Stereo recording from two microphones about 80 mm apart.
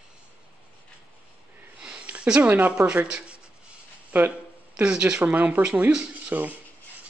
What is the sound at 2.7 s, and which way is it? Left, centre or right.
Speech, centre.